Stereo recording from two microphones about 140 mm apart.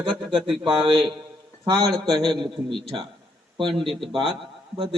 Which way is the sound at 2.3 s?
35° right (ahead or behind).